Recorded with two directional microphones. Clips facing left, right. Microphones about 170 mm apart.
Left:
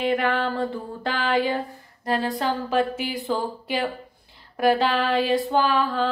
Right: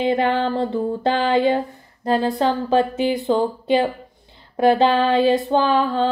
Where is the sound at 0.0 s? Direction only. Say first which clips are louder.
Right 4 dB; 25° right (ahead or behind).